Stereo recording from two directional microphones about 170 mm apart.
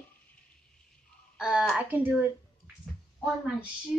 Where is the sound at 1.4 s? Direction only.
5° right (ahead or behind).